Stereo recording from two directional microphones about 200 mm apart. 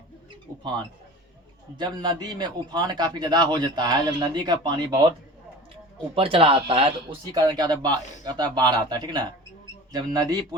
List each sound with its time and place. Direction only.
1.8 s a man's voice: 20° right (ahead or behind)
6.1 s a man's voice: 25° right (ahead or behind)